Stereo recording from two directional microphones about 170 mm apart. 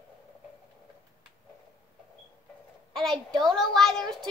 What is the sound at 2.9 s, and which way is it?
A woman's voice, 5° left (ahead or behind).